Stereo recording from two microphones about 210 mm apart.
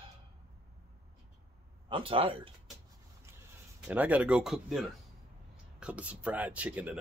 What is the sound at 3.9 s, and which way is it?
Speech, 5° right (ahead or behind).